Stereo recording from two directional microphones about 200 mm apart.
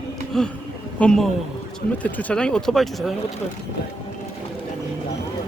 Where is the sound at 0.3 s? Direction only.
Centre (ahead or behind).